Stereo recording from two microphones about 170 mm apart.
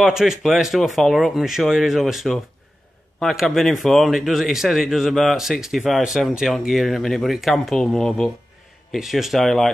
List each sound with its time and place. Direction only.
0.0 s speech: centre (ahead or behind)